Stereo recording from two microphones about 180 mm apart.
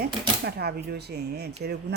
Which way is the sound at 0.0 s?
65° right (ahead or behind).